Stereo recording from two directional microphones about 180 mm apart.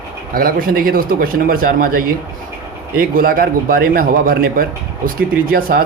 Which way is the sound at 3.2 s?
55° right (ahead or behind).